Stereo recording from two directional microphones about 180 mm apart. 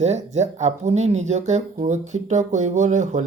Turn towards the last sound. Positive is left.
turn(degrees=-45)  # may be behind; listen again after turning